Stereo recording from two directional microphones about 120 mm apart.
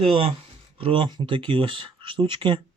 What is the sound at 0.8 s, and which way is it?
Speech, 45° right (ahead or behind).